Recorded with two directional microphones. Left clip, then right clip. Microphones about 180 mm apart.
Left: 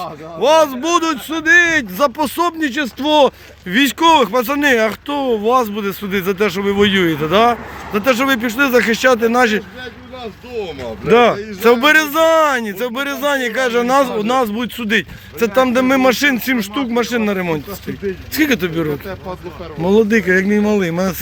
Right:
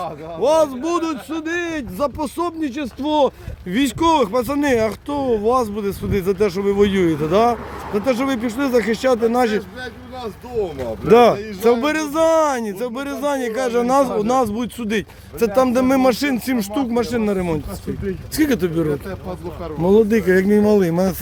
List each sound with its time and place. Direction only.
0.0 s a man's voice: centre (ahead or behind)
3.7 s speech: centre (ahead or behind)
10.8 s speech: 25° right (ahead or behind)
11.6 s speech: 5° right (ahead or behind); by 21.2 s 20° right (ahead or behind)